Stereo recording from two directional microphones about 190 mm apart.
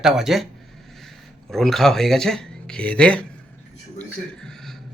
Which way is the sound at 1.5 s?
Centre (ahead or behind).